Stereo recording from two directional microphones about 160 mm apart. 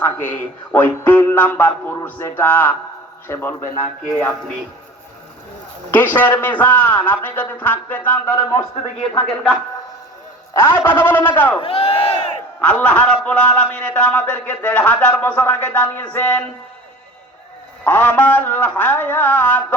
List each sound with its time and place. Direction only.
0.0 s a man's voice: 10° left (ahead or behind)
5.9 s a man's voice: 10° left (ahead or behind)
8.4 s speech: 30° left (ahead or behind)
10.5 s a man's voice: 15° left (ahead or behind)
11.6 s speech: 40° left (ahead or behind)
12.5 s a man's voice: 10° left (ahead or behind)
17.8 s a man's voice: 10° left (ahead or behind)